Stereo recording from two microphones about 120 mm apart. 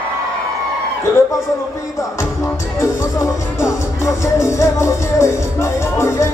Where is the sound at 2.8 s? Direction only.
25° left (ahead or behind).